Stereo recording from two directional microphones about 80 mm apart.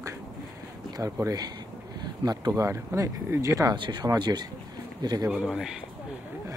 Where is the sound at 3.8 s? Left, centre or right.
Right.